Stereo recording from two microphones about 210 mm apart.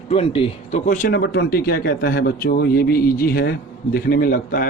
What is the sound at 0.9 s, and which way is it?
Speech, 40° left (ahead or behind).